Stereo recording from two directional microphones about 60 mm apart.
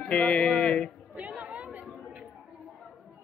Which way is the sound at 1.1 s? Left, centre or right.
Right.